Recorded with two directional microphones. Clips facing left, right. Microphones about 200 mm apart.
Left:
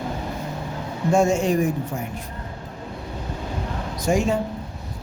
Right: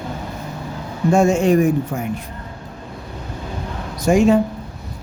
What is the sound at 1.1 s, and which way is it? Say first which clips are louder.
Speech: right 4 dB; 60° right (ahead or behind).